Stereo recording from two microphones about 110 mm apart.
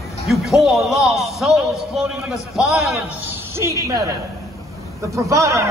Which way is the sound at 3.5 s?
25° right (ahead or behind).